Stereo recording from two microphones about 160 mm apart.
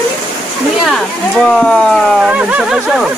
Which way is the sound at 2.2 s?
10° right (ahead or behind).